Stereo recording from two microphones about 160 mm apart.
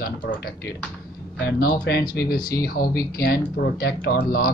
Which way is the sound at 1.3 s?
80° left.